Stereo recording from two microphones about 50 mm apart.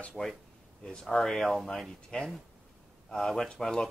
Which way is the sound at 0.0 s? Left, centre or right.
Centre.